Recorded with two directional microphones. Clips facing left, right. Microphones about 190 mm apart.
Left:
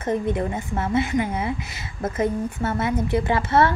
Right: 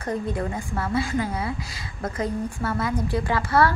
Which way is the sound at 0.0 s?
20° left (ahead or behind).